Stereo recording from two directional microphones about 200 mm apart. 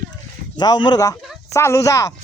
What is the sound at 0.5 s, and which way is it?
A man's voice, 20° left (ahead or behind).